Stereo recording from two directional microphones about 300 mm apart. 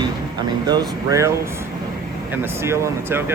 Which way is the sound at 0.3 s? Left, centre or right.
Centre.